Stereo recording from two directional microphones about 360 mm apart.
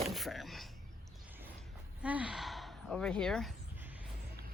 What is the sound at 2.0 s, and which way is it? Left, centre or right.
Speech, centre.